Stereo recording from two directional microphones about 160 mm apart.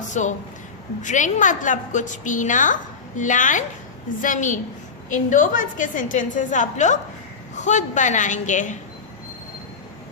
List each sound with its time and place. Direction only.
0.1 s a woman's voice: 50° left (ahead or behind)